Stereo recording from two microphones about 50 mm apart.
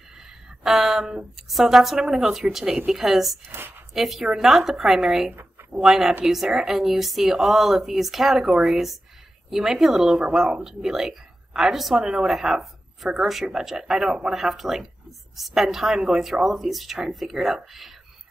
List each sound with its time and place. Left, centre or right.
0.2 s a sound: centre
1.3 s a woman's voice: centre
3.4 s a woman's voice: right
3.9 s a woman's voice: centre
5.3 s a sound: right
5.9 s a woman's voice: centre